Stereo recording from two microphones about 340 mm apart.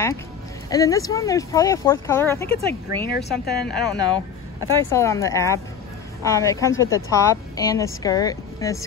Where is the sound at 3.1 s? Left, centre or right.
Left.